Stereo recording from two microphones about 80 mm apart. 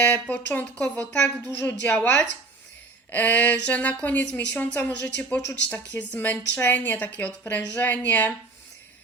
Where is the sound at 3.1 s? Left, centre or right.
Centre.